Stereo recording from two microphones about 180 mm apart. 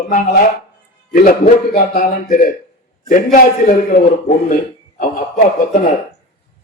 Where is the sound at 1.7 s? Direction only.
55° left (ahead or behind).